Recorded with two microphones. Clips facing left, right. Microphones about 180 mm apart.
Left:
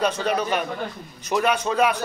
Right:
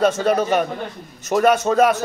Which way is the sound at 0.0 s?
45° right (ahead or behind).